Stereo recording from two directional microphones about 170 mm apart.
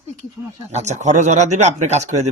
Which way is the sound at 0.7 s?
40° right (ahead or behind).